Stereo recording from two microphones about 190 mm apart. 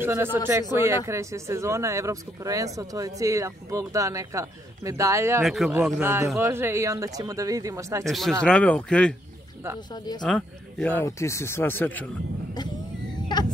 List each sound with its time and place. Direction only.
0.0 s speech: 10° right (ahead or behind)
5.4 s speech: centre (ahead or behind); by 8.0 s 15° right (ahead or behind)
8.0 s speech: centre (ahead or behind)
10.2 s speech: 5° left (ahead or behind)